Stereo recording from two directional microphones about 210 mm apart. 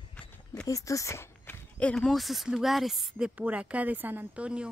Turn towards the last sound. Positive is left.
turn(degrees=-5)  # may be behind; listen again after turning